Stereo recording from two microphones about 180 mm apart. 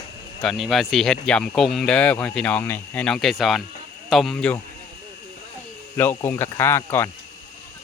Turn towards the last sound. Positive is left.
turn(degrees=15)  # may be behind; listen again after turning